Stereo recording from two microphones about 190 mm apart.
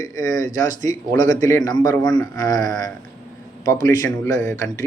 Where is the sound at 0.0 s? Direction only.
20° left (ahead or behind).